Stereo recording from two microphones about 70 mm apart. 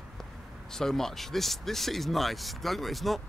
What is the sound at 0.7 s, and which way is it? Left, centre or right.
Speech, centre.